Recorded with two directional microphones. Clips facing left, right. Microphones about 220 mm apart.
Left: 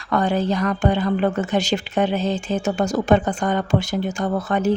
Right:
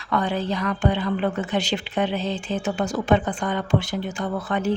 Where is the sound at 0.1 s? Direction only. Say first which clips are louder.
Left 4 dB; 45° left (ahead or behind).